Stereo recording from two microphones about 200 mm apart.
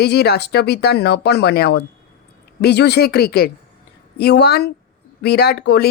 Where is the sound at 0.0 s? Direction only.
55° left (ahead or behind).